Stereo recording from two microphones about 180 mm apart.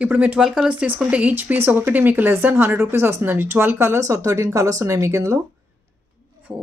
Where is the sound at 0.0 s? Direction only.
5° right (ahead or behind).